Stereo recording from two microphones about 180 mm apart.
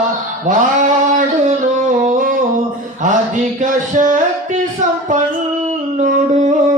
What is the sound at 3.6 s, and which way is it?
Music, 45° right (ahead or behind).